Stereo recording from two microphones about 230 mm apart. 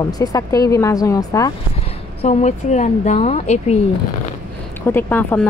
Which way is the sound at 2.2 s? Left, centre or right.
Left.